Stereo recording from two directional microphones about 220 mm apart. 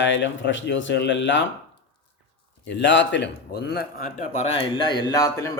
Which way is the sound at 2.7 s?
55° left (ahead or behind).